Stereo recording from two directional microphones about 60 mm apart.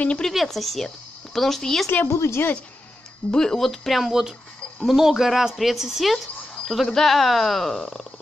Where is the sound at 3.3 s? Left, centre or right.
Centre.